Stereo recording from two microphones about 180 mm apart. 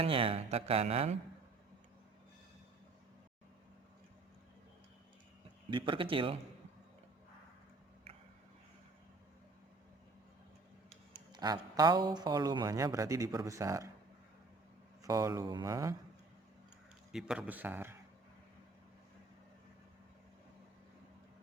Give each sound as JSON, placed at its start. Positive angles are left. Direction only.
{"t": 0.0, "sound": "a sound", "side_deg": -30}
{"t": 5.7, "sound": "speech", "side_deg": -30}
{"t": 11.1, "sound": "speech", "side_deg": -25}
{"t": 15.0, "sound": "speech", "side_deg": -20}
{"t": 17.1, "sound": "a man's voice", "side_deg": -5}